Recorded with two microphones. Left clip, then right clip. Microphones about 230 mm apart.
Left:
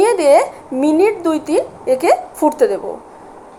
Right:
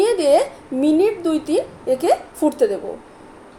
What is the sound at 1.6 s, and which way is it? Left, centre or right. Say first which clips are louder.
Speech: left 4 dB; centre.